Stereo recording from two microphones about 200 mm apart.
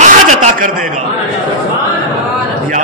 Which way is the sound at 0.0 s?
35° right (ahead or behind).